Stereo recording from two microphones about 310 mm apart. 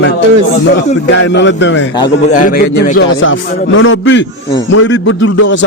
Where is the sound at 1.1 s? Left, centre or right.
Left.